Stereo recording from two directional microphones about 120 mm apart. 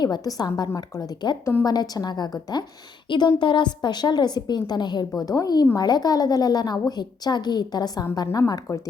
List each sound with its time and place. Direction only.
0.0 s a woman's voice: 35° left (ahead or behind)